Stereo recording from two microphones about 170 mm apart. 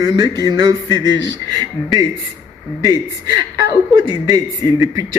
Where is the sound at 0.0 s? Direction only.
25° right (ahead or behind).